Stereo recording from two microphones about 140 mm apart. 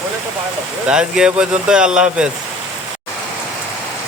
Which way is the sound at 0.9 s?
5° right (ahead or behind).